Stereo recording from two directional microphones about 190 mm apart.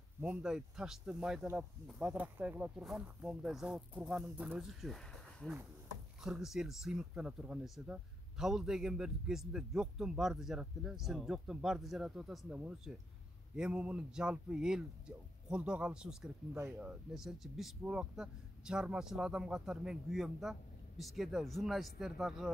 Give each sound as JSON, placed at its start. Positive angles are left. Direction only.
{"t": 0.2, "sound": "speech", "side_deg": -5}